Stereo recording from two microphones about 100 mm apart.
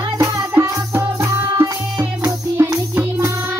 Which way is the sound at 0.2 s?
30° right (ahead or behind).